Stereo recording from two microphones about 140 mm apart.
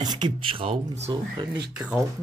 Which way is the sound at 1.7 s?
5° right (ahead or behind).